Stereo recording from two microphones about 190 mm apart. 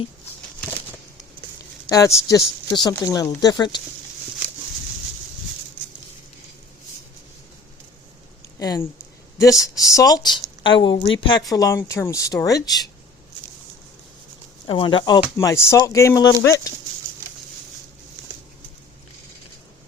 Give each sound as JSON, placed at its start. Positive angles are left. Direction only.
{"t": 1.9, "sound": "speech", "side_deg": 15}
{"t": 8.5, "sound": "speech", "side_deg": 15}
{"t": 14.7, "sound": "speech", "side_deg": 25}